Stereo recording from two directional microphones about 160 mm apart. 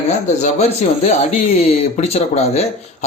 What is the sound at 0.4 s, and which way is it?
Speech, 40° left (ahead or behind).